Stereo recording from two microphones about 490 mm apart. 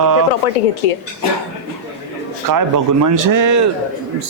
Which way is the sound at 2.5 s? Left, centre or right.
Right.